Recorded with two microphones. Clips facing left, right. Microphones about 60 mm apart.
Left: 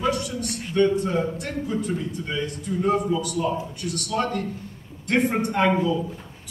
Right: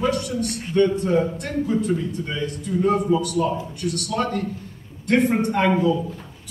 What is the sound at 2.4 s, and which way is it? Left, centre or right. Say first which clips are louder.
Speech: right 1 dB; left.